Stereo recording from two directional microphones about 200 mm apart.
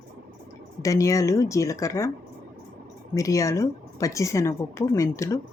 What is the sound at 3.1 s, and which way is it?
Speech, 15° left (ahead or behind).